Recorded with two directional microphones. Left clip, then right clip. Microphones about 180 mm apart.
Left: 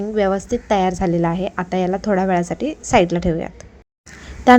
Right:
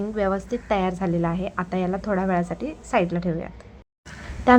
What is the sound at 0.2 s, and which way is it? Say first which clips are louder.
A woman's voice: left 6 dB; 20° left (ahead or behind).